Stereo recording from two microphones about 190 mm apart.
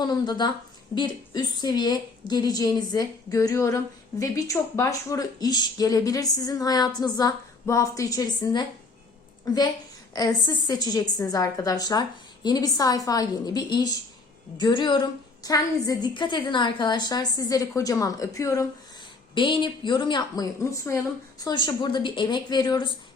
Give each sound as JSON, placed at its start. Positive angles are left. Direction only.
{"t": 0.0, "sound": "a woman's voice", "side_deg": 20}